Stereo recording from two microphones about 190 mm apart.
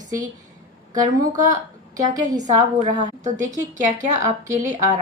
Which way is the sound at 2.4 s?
40° right (ahead or behind).